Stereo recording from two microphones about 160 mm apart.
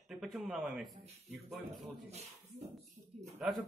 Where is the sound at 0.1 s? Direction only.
Centre (ahead or behind).